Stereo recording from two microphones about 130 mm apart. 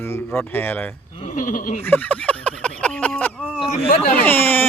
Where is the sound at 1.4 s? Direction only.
90° left.